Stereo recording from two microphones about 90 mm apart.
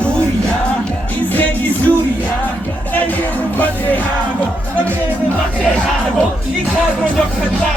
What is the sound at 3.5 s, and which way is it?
Music, 20° left (ahead or behind).